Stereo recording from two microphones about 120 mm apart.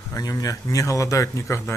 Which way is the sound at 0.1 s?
30° left (ahead or behind).